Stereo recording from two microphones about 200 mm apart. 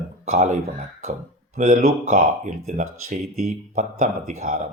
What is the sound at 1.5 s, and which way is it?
A man's voice, 45° right (ahead or behind).